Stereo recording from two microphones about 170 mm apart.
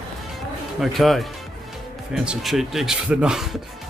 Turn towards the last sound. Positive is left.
turn(degrees=0)  # may be behind; listen again after turning